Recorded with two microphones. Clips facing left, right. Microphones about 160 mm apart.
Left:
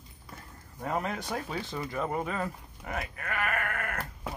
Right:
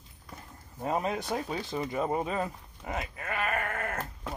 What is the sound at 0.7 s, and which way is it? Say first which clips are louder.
Speech: right 2 dB; 20° right (ahead or behind).